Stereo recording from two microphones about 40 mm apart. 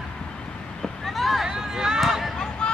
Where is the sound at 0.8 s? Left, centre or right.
Centre.